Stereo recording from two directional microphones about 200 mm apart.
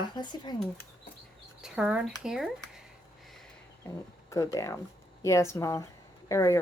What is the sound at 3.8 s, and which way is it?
Speech, 15° left (ahead or behind).